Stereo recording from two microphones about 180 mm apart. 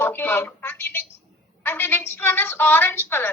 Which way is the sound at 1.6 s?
10° left (ahead or behind).